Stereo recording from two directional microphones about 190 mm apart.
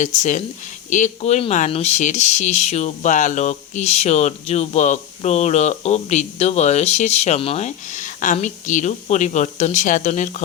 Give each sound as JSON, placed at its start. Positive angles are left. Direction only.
{"t": 0.0, "sound": "speech", "side_deg": 40}